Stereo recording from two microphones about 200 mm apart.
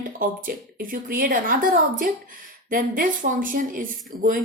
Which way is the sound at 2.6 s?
45° right (ahead or behind).